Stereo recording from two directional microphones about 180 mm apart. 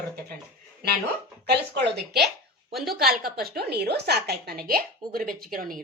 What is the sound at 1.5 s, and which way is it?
A woman's voice, 65° right (ahead or behind).